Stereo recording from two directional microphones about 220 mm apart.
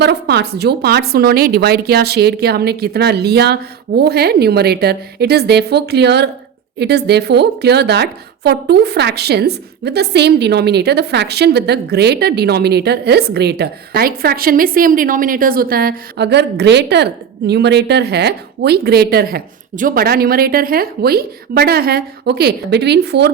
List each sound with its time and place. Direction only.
0.0 s a woman's voice: 50° right (ahead or behind)